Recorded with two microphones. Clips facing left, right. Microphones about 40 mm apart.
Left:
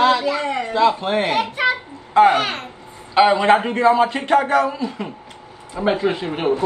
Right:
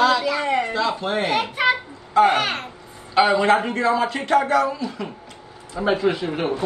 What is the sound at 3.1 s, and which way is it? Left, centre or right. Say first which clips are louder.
Speech: left 3 dB; left.